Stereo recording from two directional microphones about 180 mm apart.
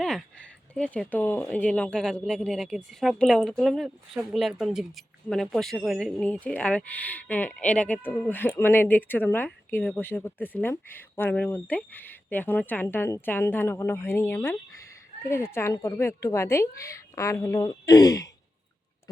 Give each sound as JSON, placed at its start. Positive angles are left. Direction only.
{"t": 0.7, "sound": "speech", "side_deg": 5}